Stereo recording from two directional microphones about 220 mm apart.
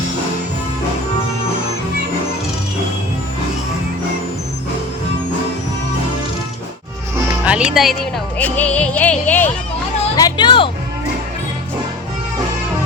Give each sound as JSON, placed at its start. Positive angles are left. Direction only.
{"t": 7.4, "sound": "speech", "side_deg": -5}
{"t": 8.4, "sound": "music", "side_deg": 5}
{"t": 10.2, "sound": "speech", "side_deg": 20}